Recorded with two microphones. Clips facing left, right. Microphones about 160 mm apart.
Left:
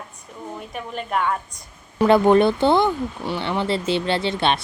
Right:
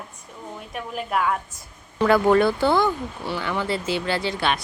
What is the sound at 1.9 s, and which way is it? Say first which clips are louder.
Speech: left 3 dB; 20° left (ahead or behind).